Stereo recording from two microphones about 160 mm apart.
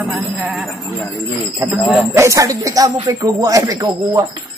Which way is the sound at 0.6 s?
10° left (ahead or behind).